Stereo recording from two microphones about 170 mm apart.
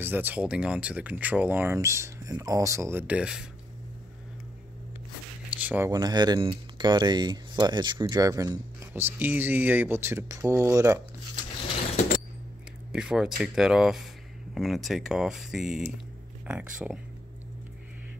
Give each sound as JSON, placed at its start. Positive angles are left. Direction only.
{"t": 0.0, "sound": "speech", "side_deg": -10}
{"t": 5.6, "sound": "speech", "side_deg": -10}
{"t": 5.9, "sound": "speech", "side_deg": -20}
{"t": 12.9, "sound": "speech", "side_deg": -5}